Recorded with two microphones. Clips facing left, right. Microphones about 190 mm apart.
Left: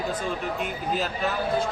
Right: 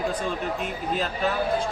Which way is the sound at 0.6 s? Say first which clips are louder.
Even; 5° left (ahead or behind).